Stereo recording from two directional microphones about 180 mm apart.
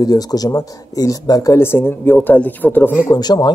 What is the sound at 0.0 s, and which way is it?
Speech, 20° left (ahead or behind).